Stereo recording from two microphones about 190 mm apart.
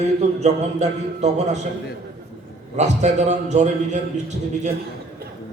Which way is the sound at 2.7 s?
35° right (ahead or behind).